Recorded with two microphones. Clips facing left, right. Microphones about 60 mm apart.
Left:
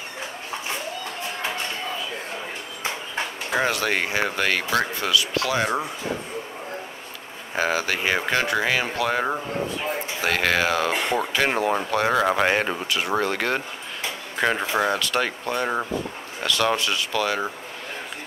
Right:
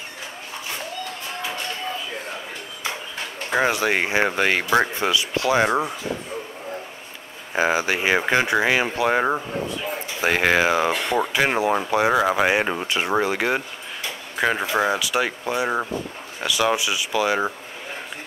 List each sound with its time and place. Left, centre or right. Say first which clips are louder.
3.6 s speech: right 3 dB; centre
7.5 s speech: right 3 dB; centre
12.8 s speech: right 2 dB; right
13.2 s speech: right 2 dB; centre